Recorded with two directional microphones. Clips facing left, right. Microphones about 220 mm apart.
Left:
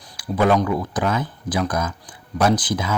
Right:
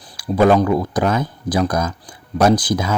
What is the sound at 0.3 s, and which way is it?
Speech, 40° right (ahead or behind).